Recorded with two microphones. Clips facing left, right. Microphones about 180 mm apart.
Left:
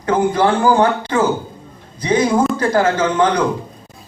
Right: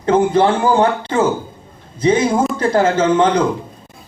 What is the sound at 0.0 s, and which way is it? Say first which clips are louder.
A man's voice: right 2 dB; 25° right (ahead or behind).